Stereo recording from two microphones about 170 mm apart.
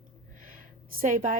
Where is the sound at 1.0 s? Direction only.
50° right (ahead or behind).